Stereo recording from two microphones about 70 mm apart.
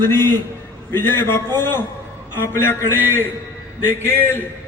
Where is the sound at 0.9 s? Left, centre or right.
Left.